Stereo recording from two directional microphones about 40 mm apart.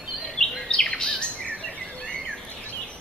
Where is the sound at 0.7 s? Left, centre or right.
Centre.